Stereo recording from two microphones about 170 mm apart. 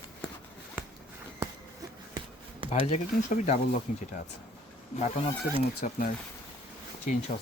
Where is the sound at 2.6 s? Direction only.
40° left (ahead or behind).